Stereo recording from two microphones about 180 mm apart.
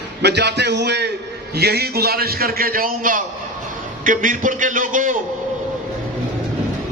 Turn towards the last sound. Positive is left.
turn(degrees=-45)  # may be behind; listen again after turning